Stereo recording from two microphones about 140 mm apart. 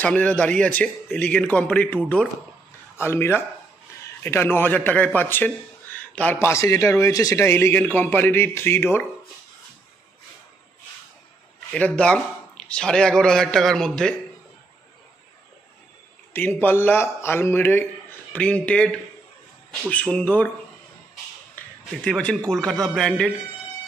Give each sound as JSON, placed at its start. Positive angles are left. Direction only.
{"t": 0.0, "sound": "a man's voice", "side_deg": 10}
{"t": 11.7, "sound": "a man's voice", "side_deg": 5}
{"t": 16.3, "sound": "a man's voice", "side_deg": 15}
{"t": 21.5, "sound": "a man's voice", "side_deg": 5}